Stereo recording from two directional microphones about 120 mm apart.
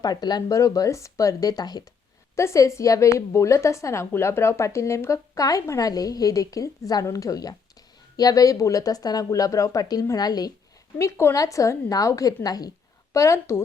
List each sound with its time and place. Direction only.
0.0 s speech: 35° left (ahead or behind)
2.3 s a woman's voice: 25° left (ahead or behind)
10.9 s a woman's voice: 20° left (ahead or behind)